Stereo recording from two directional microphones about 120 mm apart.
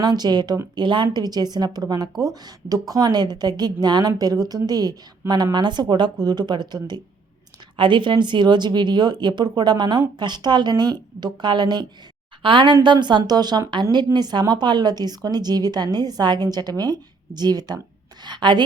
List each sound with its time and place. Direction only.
0.0 s a woman's voice: 35° right (ahead or behind)